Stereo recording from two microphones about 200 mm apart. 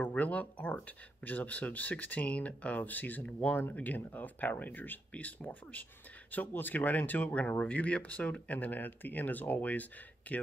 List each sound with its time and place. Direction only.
0.0 s speech: 5° left (ahead or behind)